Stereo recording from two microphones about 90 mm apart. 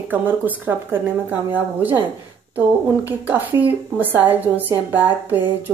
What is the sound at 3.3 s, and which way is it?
Speech, 20° right (ahead or behind).